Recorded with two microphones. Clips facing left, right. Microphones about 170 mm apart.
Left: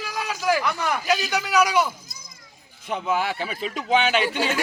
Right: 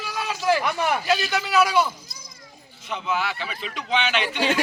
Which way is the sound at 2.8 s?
45° left (ahead or behind).